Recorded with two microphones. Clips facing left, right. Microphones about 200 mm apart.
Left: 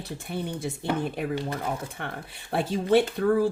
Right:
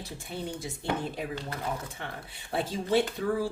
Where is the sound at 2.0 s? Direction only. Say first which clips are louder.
Left 4 dB; 60° left (ahead or behind).